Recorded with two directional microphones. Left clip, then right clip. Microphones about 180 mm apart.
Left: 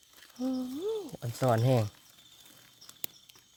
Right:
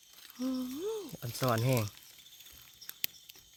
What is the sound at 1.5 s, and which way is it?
Speech, 35° left (ahead or behind).